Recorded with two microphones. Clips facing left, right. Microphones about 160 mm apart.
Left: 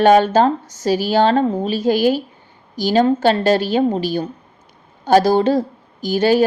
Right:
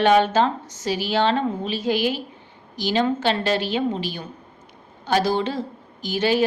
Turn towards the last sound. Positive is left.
turn(degrees=40)  # may be behind; listen again after turning